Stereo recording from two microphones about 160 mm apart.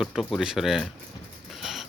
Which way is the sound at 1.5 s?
Centre (ahead or behind).